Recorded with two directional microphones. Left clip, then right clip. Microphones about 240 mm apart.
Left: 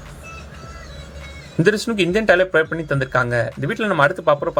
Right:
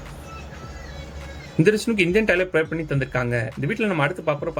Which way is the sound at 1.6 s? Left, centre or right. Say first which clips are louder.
Left 2 dB; centre.